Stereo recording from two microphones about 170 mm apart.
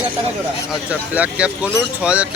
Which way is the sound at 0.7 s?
10° right (ahead or behind).